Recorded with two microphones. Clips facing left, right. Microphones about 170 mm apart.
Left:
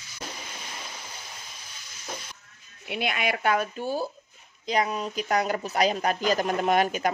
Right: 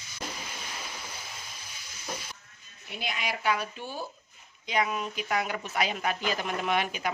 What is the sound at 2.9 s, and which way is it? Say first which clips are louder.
Speech: left 7 dB; 65° left (ahead or behind).